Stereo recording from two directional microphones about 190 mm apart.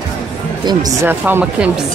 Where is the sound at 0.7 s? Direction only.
20° right (ahead or behind).